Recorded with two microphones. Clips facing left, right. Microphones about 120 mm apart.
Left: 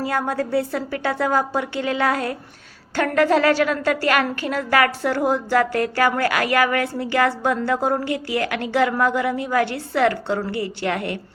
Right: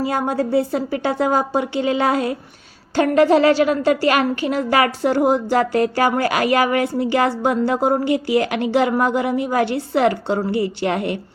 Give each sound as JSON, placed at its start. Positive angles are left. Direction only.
{"t": 0.0, "sound": "a woman's voice", "side_deg": -20}